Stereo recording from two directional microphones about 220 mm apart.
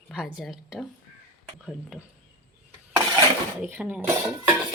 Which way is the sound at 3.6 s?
10° right (ahead or behind).